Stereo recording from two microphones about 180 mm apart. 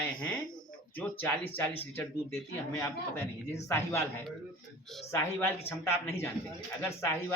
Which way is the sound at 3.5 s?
15° left (ahead or behind).